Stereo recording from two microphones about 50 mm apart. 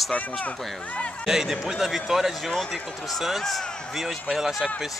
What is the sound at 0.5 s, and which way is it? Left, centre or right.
Speech, centre.